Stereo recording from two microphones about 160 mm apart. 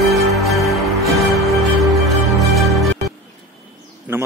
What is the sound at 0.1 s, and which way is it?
Music, centre (ahead or behind).